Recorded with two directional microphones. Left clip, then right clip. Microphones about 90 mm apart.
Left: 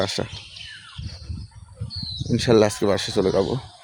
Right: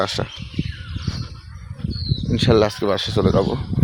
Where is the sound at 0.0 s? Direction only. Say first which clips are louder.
Right 3 dB; 35° left (ahead or behind).